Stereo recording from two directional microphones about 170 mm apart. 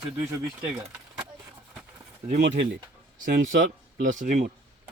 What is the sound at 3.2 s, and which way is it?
Speech, 55° right (ahead or behind).